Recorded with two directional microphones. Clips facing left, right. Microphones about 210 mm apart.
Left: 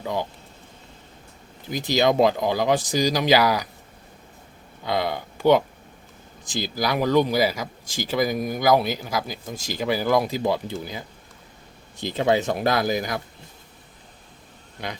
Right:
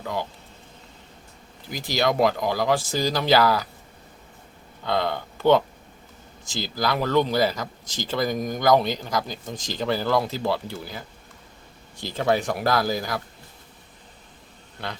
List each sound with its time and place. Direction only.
0.0 s speech: 15° left (ahead or behind)
1.7 s speech: 20° left (ahead or behind)
4.9 s speech: 10° left (ahead or behind)
14.8 s speech: 15° left (ahead or behind)